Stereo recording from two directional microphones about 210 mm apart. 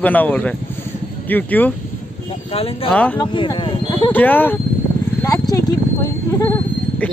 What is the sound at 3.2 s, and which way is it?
Speech, 20° left (ahead or behind).